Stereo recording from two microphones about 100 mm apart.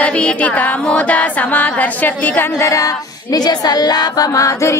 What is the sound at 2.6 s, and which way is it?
Female singing, 35° left (ahead or behind).